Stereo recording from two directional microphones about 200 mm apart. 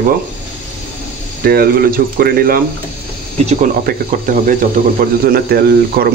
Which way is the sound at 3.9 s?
45° right (ahead or behind).